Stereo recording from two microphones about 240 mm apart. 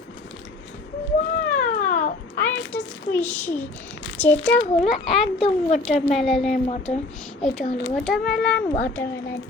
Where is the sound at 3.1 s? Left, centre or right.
Centre.